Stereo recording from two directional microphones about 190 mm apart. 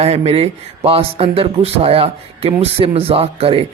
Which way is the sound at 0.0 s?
35° right (ahead or behind).